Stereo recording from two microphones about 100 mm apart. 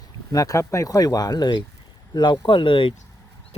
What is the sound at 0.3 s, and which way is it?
Speech, 35° left (ahead or behind).